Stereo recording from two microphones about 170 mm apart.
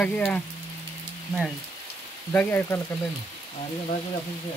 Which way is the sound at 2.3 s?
10° left (ahead or behind).